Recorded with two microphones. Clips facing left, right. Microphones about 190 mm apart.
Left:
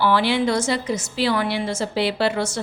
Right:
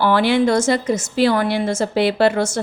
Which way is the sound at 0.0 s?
50° right (ahead or behind).